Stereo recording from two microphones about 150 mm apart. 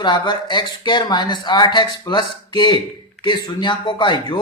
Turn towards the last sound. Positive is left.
turn(degrees=30)  # may be behind; listen again after turning